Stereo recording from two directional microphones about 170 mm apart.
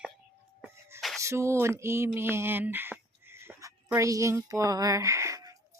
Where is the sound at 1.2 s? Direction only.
15° right (ahead or behind).